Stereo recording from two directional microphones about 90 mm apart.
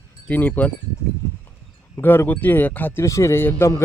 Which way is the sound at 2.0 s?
20° left (ahead or behind).